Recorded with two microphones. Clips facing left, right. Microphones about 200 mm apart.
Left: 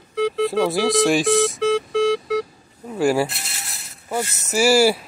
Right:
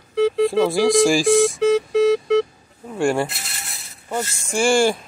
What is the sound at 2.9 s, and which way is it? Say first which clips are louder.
Mechanisms: left 1 dB; 5° left (ahead or behind).